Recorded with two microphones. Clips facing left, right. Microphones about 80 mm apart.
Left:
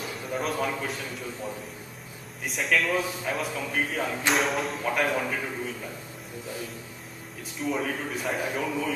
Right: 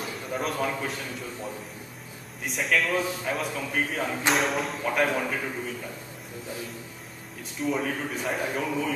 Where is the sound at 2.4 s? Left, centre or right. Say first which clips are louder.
Even; centre.